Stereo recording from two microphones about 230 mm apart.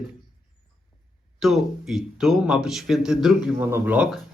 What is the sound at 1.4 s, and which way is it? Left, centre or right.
Speech, centre.